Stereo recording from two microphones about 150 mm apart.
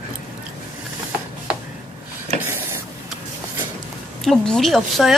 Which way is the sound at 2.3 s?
45° right (ahead or behind).